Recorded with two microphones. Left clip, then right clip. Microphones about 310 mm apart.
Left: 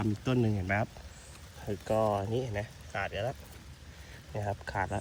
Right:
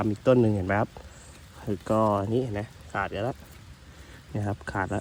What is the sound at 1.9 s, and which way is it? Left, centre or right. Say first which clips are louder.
Speech: right 5 dB; right.